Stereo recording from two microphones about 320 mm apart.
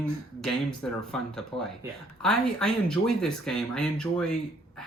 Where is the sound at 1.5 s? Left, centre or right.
Centre.